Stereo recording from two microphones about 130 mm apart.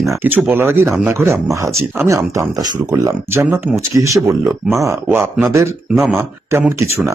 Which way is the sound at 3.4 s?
10° right (ahead or behind).